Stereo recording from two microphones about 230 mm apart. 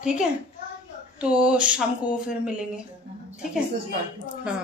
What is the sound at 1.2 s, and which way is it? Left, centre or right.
Speech, centre.